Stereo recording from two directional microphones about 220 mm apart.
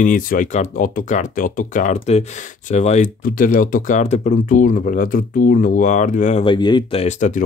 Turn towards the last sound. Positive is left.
turn(degrees=35)  # may be behind; listen again after turning